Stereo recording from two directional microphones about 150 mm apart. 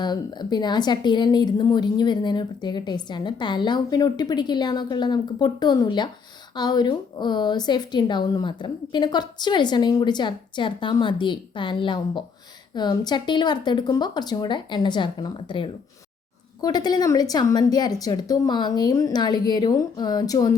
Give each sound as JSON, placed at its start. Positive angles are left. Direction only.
{"t": 0.0, "sound": "a woman's voice", "side_deg": 30}